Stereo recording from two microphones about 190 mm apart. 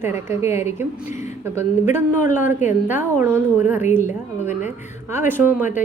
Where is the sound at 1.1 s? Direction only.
40° left (ahead or behind).